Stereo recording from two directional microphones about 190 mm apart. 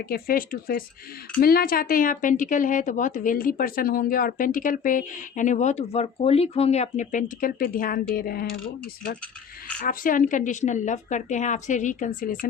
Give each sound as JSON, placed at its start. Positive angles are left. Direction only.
{"t": 0.0, "sound": "a woman's voice", "side_deg": 50}
{"t": 9.8, "sound": "a woman's voice", "side_deg": 45}